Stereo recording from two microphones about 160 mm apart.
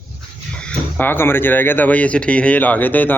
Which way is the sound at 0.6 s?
5° left (ahead or behind).